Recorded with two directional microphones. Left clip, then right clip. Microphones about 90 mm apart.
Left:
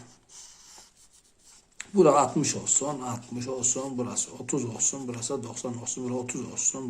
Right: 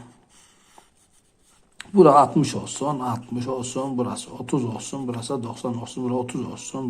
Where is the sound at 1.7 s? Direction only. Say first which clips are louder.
Right 6 dB; 30° right (ahead or behind).